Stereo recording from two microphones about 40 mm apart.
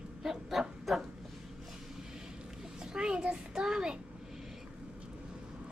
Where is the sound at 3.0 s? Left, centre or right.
Right.